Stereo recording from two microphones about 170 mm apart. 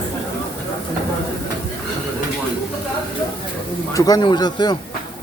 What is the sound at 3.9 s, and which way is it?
Speech, 25° left (ahead or behind).